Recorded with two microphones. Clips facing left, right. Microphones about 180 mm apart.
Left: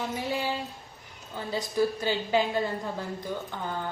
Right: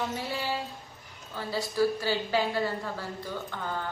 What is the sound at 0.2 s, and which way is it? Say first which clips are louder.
A woman's voice: left 2 dB; 15° left (ahead or behind).